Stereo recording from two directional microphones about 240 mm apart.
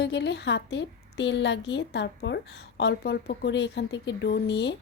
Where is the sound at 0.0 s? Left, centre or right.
Left.